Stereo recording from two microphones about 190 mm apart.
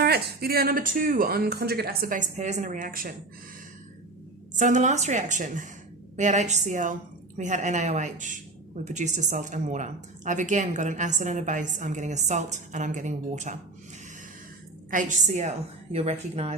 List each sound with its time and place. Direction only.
0.0 s speech: 55° right (ahead or behind)
4.5 s speech: 40° right (ahead or behind)
14.8 s speech: 45° right (ahead or behind)